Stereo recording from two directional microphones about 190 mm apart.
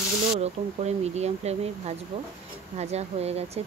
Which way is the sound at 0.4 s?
35° right (ahead or behind).